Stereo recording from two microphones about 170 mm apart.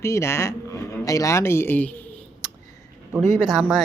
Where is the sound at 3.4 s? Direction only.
Centre (ahead or behind).